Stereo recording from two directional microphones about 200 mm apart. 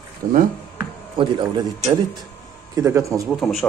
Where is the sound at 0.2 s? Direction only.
40° right (ahead or behind).